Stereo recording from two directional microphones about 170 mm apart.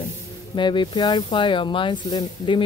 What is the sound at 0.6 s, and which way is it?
Speech, 25° left (ahead or behind).